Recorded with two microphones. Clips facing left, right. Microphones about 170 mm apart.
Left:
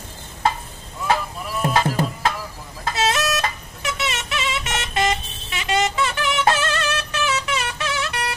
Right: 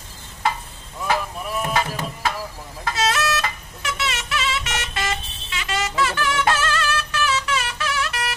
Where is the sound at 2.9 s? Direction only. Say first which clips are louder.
Left 1 dB; 25° left (ahead or behind).